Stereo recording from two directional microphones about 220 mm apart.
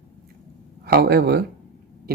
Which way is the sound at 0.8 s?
45° right (ahead or behind).